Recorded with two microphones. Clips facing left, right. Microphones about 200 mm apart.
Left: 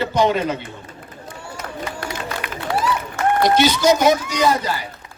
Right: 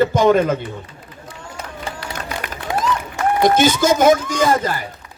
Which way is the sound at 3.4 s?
50° right (ahead or behind).